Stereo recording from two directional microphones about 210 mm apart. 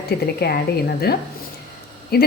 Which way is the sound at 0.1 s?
50° left (ahead or behind).